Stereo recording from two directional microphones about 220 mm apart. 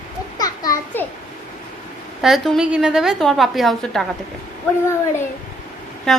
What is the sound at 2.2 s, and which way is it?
A woman's voice, centre (ahead or behind).